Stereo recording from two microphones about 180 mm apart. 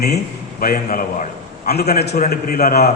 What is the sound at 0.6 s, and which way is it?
A man's voice, 55° left (ahead or behind).